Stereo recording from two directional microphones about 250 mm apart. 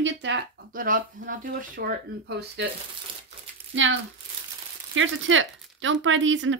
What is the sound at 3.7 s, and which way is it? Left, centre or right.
Speech, right.